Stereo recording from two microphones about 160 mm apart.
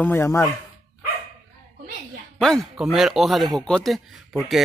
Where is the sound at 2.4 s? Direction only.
Centre (ahead or behind).